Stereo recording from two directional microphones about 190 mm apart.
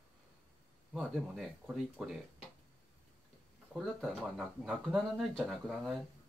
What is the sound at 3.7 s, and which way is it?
Speech, centre (ahead or behind).